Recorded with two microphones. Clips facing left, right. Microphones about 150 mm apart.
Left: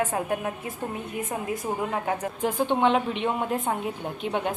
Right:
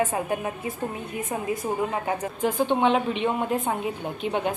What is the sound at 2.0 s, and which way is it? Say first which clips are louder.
A woman's voice: right 1 dB; centre (ahead or behind).